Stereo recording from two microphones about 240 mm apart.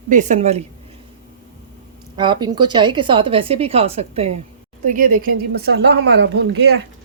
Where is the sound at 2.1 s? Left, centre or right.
Centre; by 6.8 s right.